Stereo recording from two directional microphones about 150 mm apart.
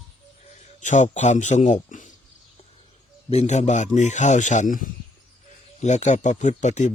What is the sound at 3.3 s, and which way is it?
Speech, 45° left (ahead or behind).